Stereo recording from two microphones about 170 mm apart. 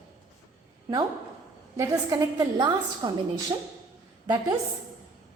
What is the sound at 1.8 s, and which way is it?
A woman's voice, 25° right (ahead or behind).